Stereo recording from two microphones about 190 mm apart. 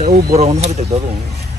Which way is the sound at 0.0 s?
35° right (ahead or behind).